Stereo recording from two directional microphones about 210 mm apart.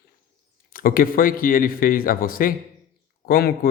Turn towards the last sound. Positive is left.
turn(degrees=45)  # may be behind; listen again after turning